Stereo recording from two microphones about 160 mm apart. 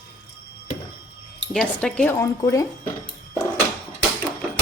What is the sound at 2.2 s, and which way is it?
Speech, 20° left (ahead or behind).